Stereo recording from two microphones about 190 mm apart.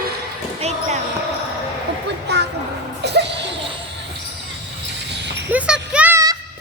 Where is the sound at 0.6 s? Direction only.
35° right (ahead or behind).